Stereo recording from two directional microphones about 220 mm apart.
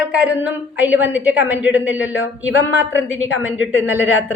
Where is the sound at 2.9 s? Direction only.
60° left (ahead or behind).